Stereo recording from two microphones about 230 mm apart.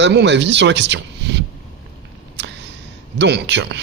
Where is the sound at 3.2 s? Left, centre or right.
Right.